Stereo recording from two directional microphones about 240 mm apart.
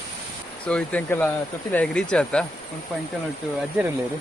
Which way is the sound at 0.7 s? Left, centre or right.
Centre.